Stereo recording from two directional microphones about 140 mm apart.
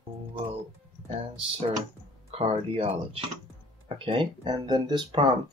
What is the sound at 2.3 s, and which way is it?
Speech, 45° right (ahead or behind).